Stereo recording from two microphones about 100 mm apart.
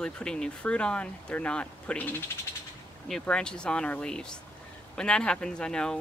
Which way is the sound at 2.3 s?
25° left (ahead or behind).